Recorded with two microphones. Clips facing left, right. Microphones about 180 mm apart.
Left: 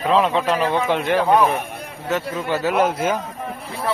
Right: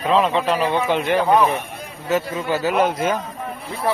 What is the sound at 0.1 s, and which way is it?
A man's voice, centre (ahead or behind).